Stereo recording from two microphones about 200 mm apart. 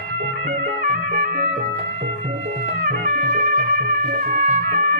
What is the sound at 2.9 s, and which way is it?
Music, 40° right (ahead or behind).